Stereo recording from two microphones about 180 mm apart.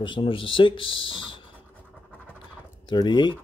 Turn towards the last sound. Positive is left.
turn(degrees=25)  # may be behind; listen again after turning